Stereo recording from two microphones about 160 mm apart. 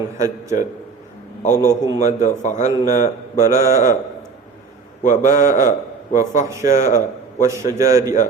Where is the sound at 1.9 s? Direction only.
50° left (ahead or behind).